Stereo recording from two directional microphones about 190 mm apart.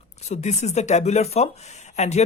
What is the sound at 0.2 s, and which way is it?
Speech, 35° left (ahead or behind).